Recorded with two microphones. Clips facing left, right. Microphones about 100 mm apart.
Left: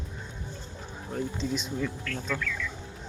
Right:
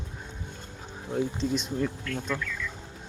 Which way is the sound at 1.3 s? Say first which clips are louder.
Right 3 dB; centre (ahead or behind).